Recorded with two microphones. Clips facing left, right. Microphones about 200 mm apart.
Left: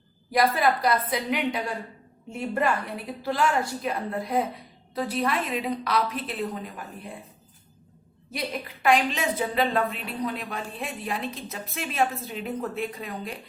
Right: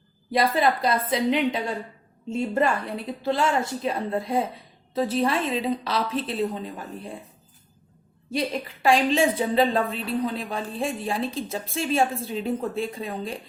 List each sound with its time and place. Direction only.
0.3 s a woman's voice: 25° right (ahead or behind)
8.3 s a woman's voice: 30° right (ahead or behind)